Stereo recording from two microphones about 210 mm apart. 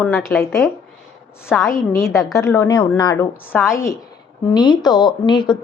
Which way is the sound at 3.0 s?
20° left (ahead or behind).